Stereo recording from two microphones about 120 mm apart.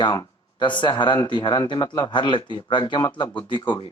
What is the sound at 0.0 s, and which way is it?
Speech, 40° left (ahead or behind).